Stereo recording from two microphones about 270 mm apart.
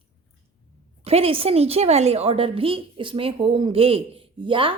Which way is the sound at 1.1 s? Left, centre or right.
Right.